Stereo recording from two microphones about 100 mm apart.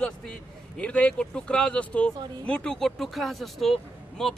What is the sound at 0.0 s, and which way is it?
Speech, 5° left (ahead or behind).